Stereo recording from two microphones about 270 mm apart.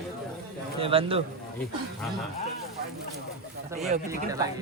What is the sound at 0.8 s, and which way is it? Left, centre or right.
Speech, centre.